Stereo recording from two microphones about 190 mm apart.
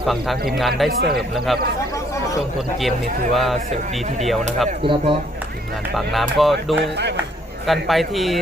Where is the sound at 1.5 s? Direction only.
Centre (ahead or behind).